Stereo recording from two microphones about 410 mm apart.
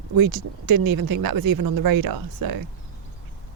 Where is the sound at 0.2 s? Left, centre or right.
Right.